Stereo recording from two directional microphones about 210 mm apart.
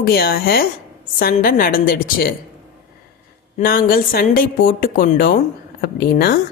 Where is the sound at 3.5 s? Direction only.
45° left (ahead or behind).